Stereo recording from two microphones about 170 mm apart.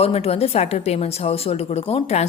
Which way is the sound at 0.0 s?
35° left (ahead or behind).